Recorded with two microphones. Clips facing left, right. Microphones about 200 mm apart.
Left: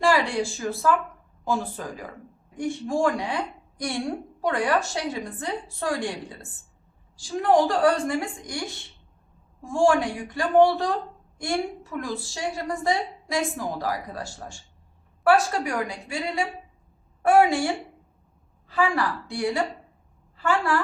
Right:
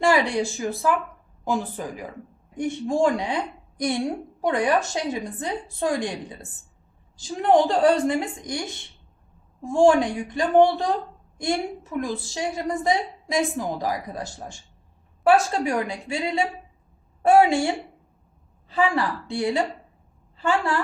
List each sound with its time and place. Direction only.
0.0 s a woman's voice: 20° right (ahead or behind)
9.6 s a woman's voice: 20° right (ahead or behind)
18.7 s a woman's voice: 20° right (ahead or behind)